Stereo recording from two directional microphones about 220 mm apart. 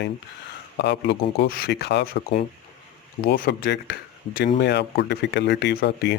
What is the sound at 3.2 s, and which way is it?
Speech, 40° left (ahead or behind).